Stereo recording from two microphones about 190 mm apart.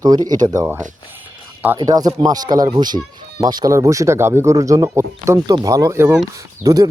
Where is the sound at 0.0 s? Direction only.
20° right (ahead or behind).